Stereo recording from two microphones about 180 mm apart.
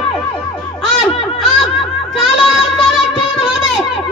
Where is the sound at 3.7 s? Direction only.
5° right (ahead or behind).